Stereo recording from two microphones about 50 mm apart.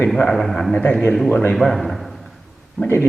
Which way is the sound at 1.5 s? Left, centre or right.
Centre.